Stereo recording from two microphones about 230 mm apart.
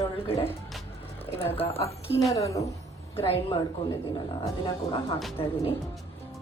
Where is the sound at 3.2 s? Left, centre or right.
Left.